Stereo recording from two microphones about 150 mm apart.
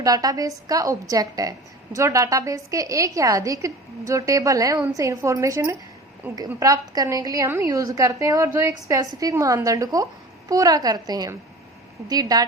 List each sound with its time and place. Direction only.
0.0 s a woman's voice: 25° right (ahead or behind)